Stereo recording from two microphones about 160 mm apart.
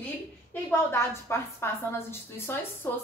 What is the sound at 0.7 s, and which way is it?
A woman's voice, 15° left (ahead or behind).